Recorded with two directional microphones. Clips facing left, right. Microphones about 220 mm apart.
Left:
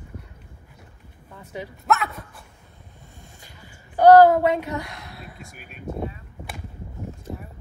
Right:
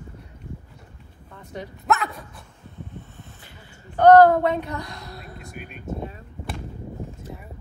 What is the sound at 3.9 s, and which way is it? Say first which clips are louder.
Speech: left 1 dB; 10° left (ahead or behind).